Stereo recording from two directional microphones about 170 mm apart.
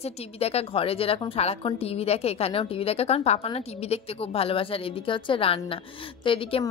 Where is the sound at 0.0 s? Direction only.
35° left (ahead or behind).